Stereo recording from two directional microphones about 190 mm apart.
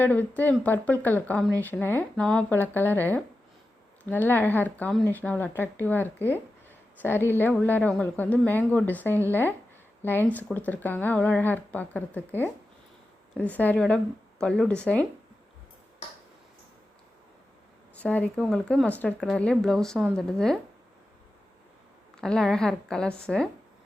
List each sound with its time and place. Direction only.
0.0 s speech: 10° left (ahead or behind)
18.0 s speech: 5° left (ahead or behind)
22.2 s speech: centre (ahead or behind)